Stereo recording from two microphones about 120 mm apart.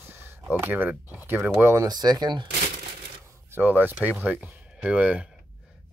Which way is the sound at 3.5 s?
15° right (ahead or behind).